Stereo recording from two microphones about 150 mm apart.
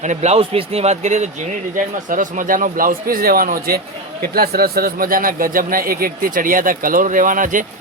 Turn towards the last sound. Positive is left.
turn(degrees=-60)  # may be behind; listen again after turning